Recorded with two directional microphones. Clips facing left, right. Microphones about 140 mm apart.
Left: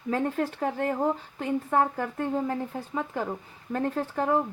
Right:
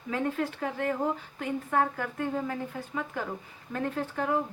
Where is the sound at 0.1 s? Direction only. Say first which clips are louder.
Left 3 dB; 40° left (ahead or behind).